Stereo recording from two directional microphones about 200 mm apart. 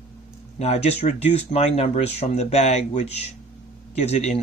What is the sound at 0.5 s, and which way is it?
Speech, 30° left (ahead or behind).